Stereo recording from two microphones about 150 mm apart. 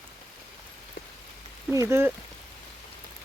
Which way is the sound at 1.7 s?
15° right (ahead or behind).